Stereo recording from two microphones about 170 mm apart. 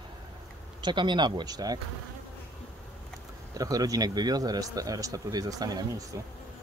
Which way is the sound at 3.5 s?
20° right (ahead or behind).